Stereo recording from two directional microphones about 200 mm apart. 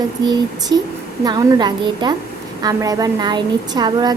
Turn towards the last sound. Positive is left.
turn(degrees=-20)  # may be behind; listen again after turning